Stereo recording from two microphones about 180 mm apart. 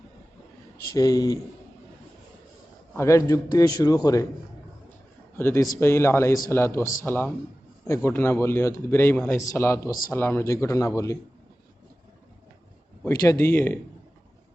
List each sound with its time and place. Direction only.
0.9 s a man's voice: 20° left (ahead or behind)
2.9 s a man's voice: 15° left (ahead or behind)
5.4 s speech: 15° left (ahead or behind)
13.1 s speech: 15° left (ahead or behind)